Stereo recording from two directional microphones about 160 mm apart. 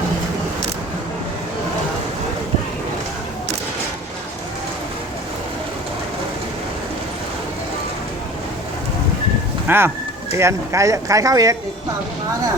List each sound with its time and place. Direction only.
9.6 s speech: 15° right (ahead or behind)